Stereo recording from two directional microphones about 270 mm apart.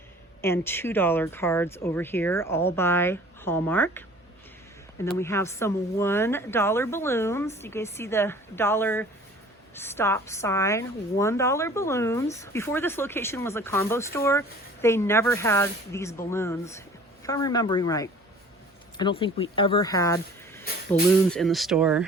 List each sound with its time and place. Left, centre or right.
0.4 s a woman's voice: centre